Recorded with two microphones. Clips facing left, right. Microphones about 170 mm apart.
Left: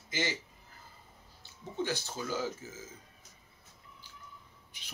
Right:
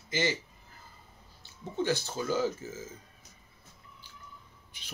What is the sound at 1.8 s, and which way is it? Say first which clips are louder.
Speech: right 5 dB; 10° left (ahead or behind).